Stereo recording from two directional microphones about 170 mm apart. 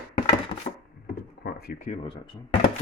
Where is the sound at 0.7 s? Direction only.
50° left (ahead or behind).